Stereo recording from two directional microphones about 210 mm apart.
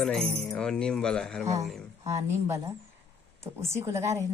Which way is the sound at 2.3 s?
15° right (ahead or behind).